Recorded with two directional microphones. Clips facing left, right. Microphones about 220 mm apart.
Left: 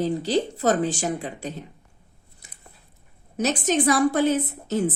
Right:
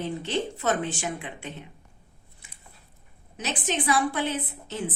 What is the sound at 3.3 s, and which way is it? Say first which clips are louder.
Speech: left 8 dB; 40° left (ahead or behind).